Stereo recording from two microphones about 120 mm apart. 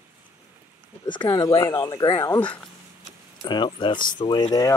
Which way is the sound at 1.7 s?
25° left (ahead or behind).